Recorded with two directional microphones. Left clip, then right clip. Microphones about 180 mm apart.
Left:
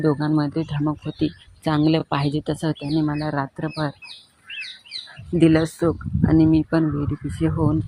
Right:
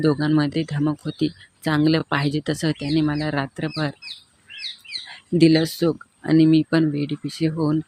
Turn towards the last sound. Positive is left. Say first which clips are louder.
# even
turn(degrees=-15)  # may be behind; listen again after turning